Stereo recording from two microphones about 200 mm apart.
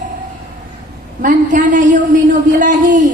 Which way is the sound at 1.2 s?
40° right (ahead or behind).